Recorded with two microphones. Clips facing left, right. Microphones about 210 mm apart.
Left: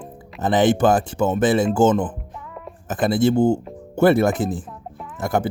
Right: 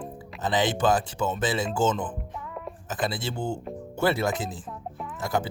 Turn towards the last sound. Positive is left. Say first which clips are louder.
# left 5 dB
turn(degrees=50)  # may be behind; listen again after turning